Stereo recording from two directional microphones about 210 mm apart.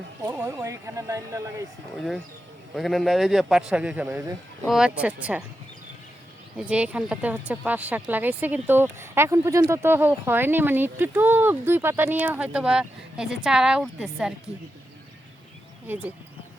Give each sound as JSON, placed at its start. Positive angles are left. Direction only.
{"t": 0.3, "sound": "speech", "side_deg": -15}
{"t": 2.0, "sound": "a man's voice", "side_deg": 0}
{"t": 6.6, "sound": "speech", "side_deg": -5}
{"t": 15.9, "sound": "speech", "side_deg": -10}